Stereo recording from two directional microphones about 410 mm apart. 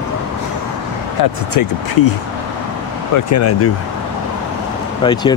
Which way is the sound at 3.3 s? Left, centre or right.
Left.